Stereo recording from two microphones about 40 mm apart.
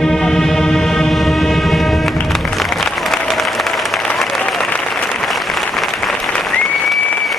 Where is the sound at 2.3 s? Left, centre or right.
Centre.